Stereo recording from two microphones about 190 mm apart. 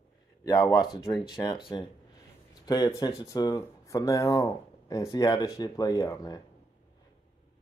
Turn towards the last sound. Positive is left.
turn(degrees=20)  # may be behind; listen again after turning